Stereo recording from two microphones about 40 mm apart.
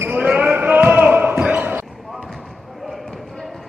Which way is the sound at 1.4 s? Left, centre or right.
Right.